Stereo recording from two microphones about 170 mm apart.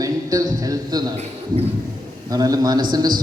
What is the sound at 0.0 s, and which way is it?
A man's voice, 20° right (ahead or behind).